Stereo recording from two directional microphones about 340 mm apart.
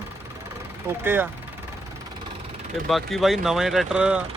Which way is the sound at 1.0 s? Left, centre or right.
Centre.